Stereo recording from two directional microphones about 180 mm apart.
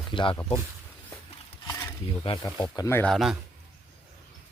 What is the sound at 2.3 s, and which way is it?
Speech, 20° left (ahead or behind).